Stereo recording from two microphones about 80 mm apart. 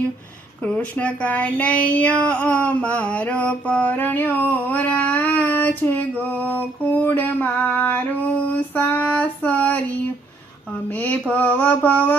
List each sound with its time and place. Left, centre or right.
0.6 s speech: centre
2.3 s mantra: centre
10.8 s mantra: left